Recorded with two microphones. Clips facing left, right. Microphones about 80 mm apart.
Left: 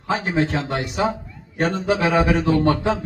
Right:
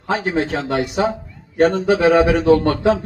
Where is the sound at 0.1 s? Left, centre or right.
Right.